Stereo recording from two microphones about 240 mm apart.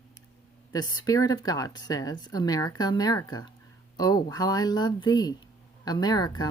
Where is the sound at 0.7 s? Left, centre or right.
Centre.